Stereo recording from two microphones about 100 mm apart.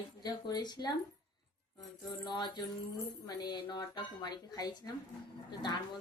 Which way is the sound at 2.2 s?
45° left (ahead or behind).